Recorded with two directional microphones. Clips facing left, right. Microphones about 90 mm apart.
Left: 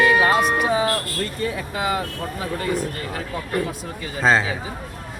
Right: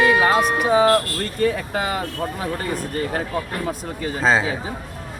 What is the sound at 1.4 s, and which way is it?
Speech, 55° right (ahead or behind).